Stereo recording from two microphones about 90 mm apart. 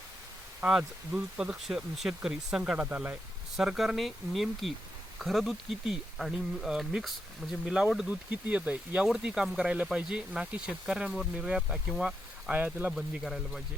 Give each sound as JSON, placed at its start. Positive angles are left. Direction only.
{"t": 0.8, "sound": "speech", "side_deg": -10}
{"t": 3.6, "sound": "speech", "side_deg": -5}
{"t": 12.5, "sound": "speech", "side_deg": -20}
{"t": 12.9, "sound": "speech", "side_deg": -5}